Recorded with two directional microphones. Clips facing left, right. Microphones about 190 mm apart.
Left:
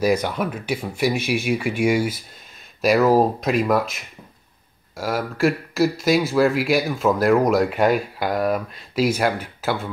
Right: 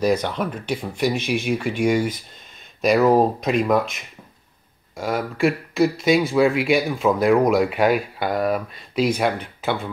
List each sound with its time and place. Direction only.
0.0 s speech: 10° left (ahead or behind)